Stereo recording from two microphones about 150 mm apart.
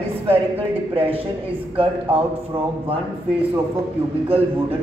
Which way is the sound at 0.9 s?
40° right (ahead or behind).